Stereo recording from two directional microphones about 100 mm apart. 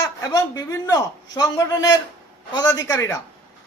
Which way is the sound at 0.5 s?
35° left (ahead or behind).